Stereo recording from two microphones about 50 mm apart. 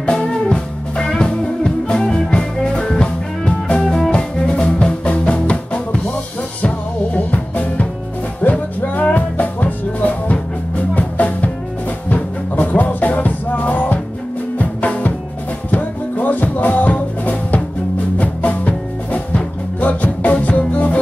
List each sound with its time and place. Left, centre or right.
0.0 s music: left
7.2 s music: left